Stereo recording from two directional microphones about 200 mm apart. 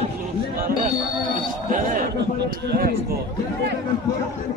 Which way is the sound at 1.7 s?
40° right (ahead or behind).